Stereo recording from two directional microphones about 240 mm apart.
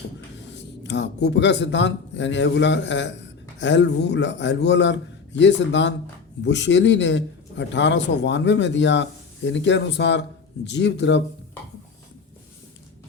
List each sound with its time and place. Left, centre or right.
0.9 s a man's voice: left